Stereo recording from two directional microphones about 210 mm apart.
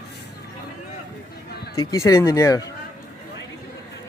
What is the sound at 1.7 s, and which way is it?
Speech, 15° left (ahead or behind).